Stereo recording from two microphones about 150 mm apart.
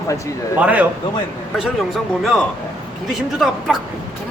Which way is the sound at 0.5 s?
10° right (ahead or behind).